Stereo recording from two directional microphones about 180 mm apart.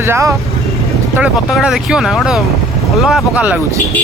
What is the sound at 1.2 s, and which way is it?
Speech, 5° right (ahead or behind).